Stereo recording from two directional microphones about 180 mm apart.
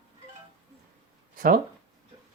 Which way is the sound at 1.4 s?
50° right (ahead or behind).